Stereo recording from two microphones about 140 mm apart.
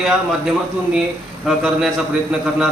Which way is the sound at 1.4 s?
Centre (ahead or behind).